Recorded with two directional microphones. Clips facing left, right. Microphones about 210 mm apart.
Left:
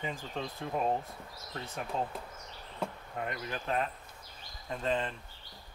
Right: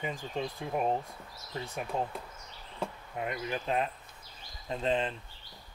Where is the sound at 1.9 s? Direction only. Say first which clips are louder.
Right 1 dB; 10° right (ahead or behind).